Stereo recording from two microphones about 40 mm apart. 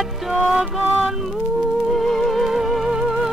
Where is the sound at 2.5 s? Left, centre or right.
Centre.